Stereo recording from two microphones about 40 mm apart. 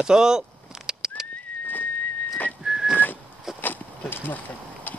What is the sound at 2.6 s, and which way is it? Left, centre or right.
Whistling, centre.